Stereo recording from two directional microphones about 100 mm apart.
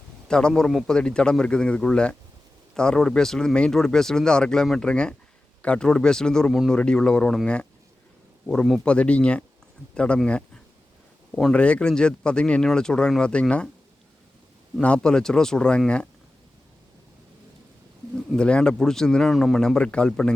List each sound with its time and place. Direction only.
0.3 s speech: 5° left (ahead or behind)
14.8 s speech: 10° left (ahead or behind)
18.3 s speech: 10° left (ahead or behind)